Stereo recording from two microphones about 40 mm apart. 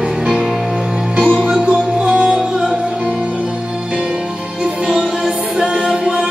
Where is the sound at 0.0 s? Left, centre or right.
Centre.